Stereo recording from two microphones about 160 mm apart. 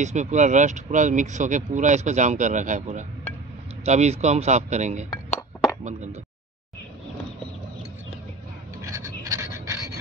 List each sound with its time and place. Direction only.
0.0 s speech: 45° right (ahead or behind)
8.8 s scratch: 20° right (ahead or behind)